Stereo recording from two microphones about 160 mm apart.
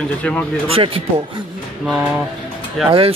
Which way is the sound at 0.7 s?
35° right (ahead or behind).